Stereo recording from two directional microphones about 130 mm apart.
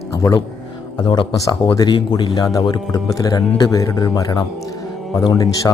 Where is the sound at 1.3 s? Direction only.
25° left (ahead or behind).